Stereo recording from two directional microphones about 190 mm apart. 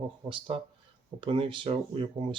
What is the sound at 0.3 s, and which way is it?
Speech, 25° right (ahead or behind).